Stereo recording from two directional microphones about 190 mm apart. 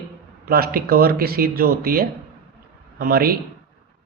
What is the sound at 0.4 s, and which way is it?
A man's voice, 55° right (ahead or behind).